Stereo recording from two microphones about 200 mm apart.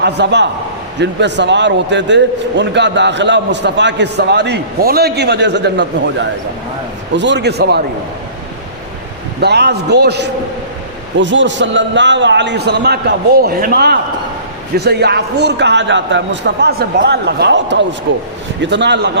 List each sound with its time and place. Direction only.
0.0 s a man's voice: 60° right (ahead or behind)
9.4 s a man's voice: 55° right (ahead or behind)